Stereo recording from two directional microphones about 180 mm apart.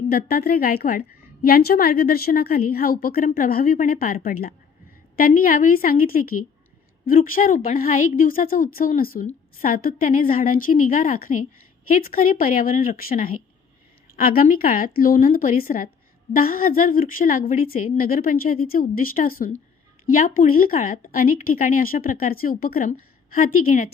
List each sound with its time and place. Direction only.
0.1 s a woman's voice: 55° left (ahead or behind)